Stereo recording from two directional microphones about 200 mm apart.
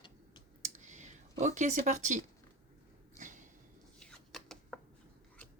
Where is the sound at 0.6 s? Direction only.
35° right (ahead or behind).